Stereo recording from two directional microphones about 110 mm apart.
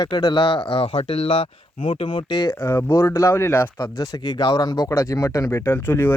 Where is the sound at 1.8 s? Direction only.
50° left (ahead or behind).